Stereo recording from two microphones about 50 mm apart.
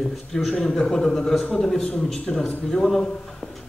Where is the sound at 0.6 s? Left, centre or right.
Centre.